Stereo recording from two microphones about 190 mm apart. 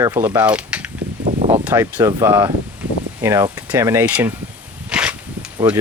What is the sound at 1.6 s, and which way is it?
Speech, 10° right (ahead or behind).